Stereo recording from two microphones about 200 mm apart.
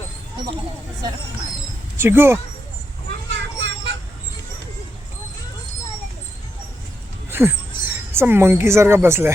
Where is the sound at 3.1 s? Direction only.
65° right (ahead or behind).